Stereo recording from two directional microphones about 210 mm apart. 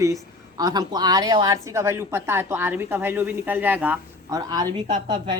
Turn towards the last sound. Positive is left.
turn(degrees=-20)  # may be behind; listen again after turning